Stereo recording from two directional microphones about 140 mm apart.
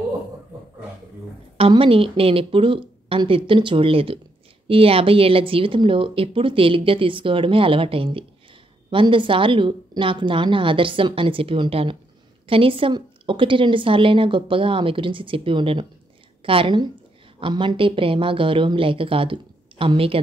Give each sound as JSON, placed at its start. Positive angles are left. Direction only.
{"t": 1.6, "sound": "speech", "side_deg": -40}